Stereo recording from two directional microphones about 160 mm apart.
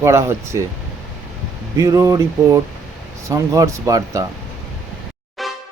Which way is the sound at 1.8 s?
20° right (ahead or behind).